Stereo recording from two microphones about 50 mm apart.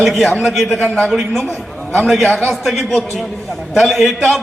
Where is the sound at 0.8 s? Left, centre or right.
Centre.